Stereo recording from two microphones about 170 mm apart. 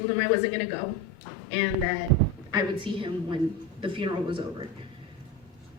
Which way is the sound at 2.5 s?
25° right (ahead or behind).